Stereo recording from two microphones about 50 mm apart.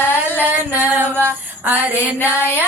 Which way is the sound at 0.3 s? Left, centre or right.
Right.